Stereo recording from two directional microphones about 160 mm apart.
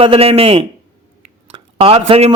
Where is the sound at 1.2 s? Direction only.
35° right (ahead or behind).